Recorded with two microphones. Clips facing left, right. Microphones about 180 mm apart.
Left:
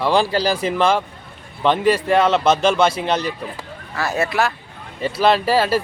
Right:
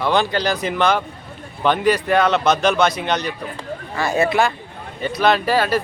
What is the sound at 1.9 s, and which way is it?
Speech, 25° left (ahead or behind).